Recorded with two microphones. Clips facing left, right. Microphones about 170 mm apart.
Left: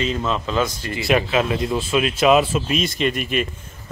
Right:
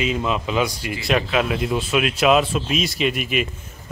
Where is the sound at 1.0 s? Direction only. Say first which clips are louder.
Left 2 dB; centre (ahead or behind).